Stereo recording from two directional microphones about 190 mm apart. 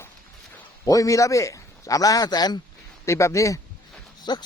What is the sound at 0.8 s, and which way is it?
A man's voice, 15° left (ahead or behind).